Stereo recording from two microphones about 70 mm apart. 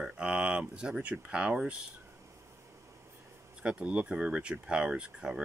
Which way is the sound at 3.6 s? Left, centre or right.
Centre.